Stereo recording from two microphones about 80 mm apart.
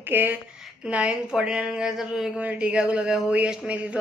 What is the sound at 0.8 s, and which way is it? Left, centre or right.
Speech, centre.